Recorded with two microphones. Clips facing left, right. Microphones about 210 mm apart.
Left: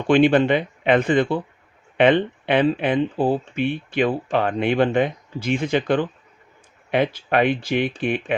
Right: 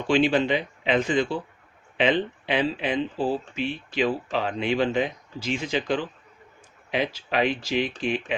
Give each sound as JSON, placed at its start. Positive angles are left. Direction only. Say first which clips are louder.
{"t": 0.1, "sound": "speech", "louder": "left 6 dB", "side_deg": 55}